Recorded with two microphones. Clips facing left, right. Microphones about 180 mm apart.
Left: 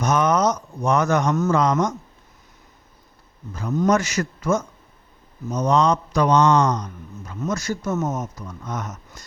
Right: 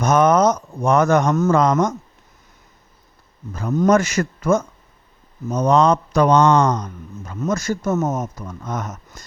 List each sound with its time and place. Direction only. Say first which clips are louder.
0.0 s speech: right 4 dB; 50° right (ahead or behind)
3.5 s speech: right 4 dB; 50° right (ahead or behind)